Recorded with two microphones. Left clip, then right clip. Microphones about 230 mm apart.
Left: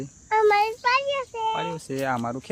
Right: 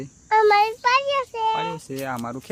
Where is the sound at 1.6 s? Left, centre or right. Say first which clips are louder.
Right 1 dB; centre.